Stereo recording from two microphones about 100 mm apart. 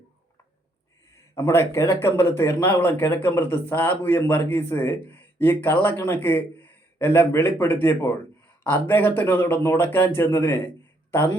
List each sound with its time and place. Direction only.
1.1 s a man's voice: 25° left (ahead or behind)